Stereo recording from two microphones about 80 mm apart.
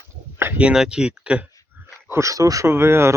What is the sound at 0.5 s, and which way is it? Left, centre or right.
Speech, centre.